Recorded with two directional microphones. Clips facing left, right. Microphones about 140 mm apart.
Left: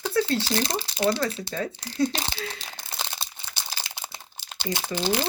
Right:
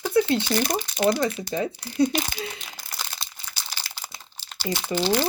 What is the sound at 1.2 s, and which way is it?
Speech, 30° left (ahead or behind).